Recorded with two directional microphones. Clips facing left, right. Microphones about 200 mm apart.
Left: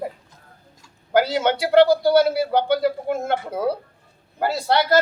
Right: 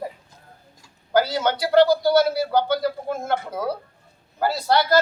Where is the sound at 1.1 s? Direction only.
25° left (ahead or behind).